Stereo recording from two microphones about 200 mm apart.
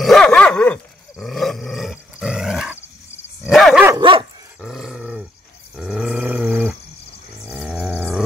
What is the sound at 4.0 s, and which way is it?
Dog, 25° right (ahead or behind).